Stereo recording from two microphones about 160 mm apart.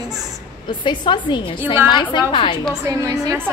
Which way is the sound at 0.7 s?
30° left (ahead or behind).